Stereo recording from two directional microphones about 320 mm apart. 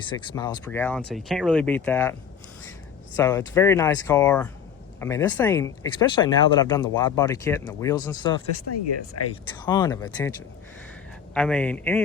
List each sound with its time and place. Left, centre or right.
0.1 s speech: centre
3.2 s speech: centre
8.7 s speech: left
9.6 s speech: centre
11.3 s speech: centre